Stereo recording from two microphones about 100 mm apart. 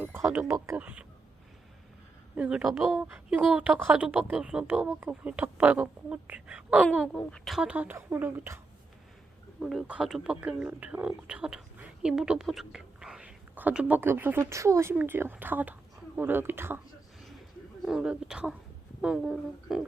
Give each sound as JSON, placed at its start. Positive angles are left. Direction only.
{"t": 0.0, "sound": "speech", "side_deg": -25}
{"t": 0.8, "sound": "a woman's voice", "side_deg": -15}
{"t": 2.3, "sound": "a woman's voice", "side_deg": -15}
{"t": 7.2, "sound": "speech", "side_deg": 5}
{"t": 7.6, "sound": "a woman's voice", "side_deg": -15}
{"t": 7.9, "sound": "speech", "side_deg": -25}
{"t": 9.6, "sound": "speech", "side_deg": -5}
{"t": 17.8, "sound": "a woman's voice", "side_deg": -5}